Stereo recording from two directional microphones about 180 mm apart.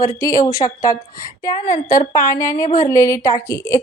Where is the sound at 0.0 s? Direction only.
15° left (ahead or behind).